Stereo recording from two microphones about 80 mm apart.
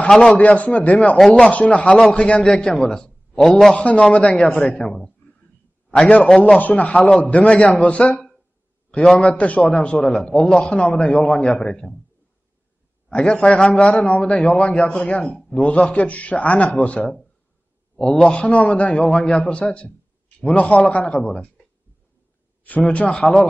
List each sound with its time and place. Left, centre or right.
0.1 s a man's voice: centre
0.4 s a man's voice: centre
1.1 s a man's voice: centre
3.7 s a man's voice: centre
6.6 s a man's voice: centre
13.1 s a man's voice: centre
22.6 s a man's voice: centre